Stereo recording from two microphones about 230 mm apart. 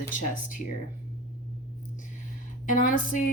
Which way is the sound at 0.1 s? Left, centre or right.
Left.